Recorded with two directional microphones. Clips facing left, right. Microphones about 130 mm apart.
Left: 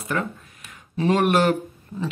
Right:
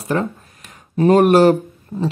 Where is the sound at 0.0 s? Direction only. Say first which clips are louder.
Right 6 dB; 30° right (ahead or behind).